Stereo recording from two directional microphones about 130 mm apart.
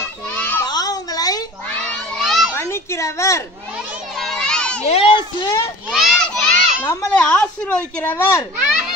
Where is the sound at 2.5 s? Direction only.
20° left (ahead or behind).